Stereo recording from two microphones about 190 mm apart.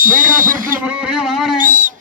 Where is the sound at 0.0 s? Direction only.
45° right (ahead or behind).